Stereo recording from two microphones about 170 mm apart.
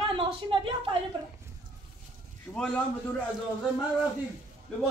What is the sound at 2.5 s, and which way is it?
Speech, 5° left (ahead or behind).